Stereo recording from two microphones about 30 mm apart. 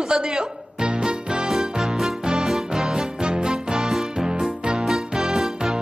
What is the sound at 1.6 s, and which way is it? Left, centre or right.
Music, centre.